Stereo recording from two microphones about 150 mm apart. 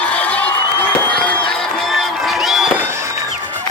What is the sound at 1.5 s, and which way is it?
Music, centre (ahead or behind).